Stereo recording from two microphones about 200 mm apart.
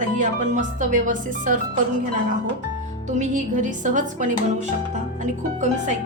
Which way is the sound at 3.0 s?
40° right (ahead or behind).